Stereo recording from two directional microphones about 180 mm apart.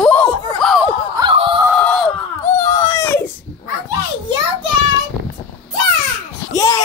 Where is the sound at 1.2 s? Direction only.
30° right (ahead or behind).